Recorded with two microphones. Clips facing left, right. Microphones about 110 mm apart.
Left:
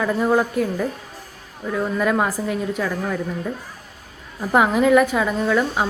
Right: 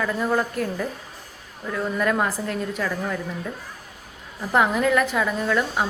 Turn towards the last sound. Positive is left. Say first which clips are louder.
# left 3 dB
turn(degrees=5)  # may be behind; listen again after turning